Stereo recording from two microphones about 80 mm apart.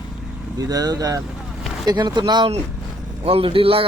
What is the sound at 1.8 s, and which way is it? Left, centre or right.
Speech, right.